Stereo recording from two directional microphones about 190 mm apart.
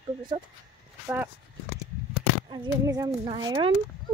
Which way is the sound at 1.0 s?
10° right (ahead or behind).